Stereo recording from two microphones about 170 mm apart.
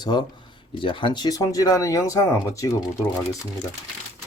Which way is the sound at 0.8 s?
30° left (ahead or behind).